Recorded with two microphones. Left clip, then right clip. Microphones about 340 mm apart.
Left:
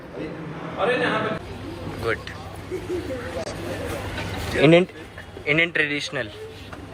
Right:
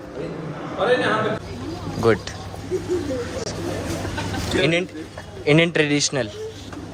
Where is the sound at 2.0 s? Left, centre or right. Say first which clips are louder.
Right 7 dB; centre.